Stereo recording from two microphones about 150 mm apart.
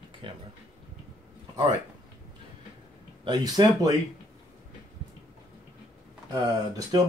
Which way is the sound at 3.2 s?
25° right (ahead or behind).